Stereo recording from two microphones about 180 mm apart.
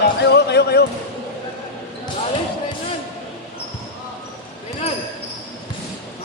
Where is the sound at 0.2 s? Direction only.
65° left (ahead or behind).